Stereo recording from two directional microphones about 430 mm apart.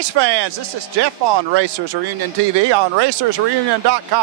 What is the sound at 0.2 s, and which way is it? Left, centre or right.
Speech, right.